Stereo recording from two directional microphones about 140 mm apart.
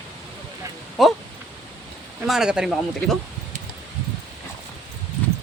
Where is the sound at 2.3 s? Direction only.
5° right (ahead or behind).